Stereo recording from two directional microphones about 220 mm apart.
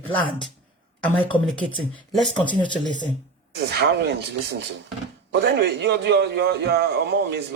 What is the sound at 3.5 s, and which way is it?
A man's voice, 50° right (ahead or behind).